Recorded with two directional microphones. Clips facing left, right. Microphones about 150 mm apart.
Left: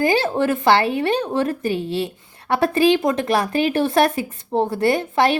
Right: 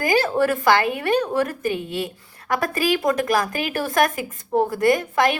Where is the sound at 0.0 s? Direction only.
25° left (ahead or behind).